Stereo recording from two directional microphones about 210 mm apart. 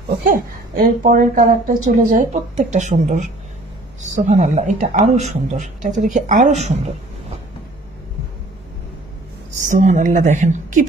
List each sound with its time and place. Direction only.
0.2 s a woman's voice: 40° right (ahead or behind)
9.6 s a woman's voice: 35° right (ahead or behind)